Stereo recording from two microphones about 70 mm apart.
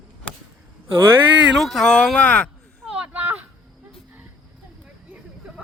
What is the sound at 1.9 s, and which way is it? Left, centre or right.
Speech, centre.